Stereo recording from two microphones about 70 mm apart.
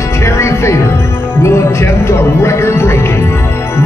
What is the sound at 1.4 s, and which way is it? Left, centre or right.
Speech, left.